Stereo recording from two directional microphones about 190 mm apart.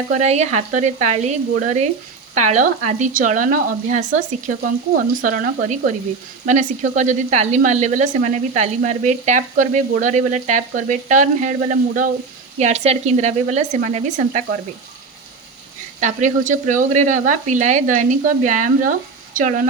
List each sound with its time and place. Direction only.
0.1 s speech: 35° right (ahead or behind)
16.0 s speech: 40° right (ahead or behind)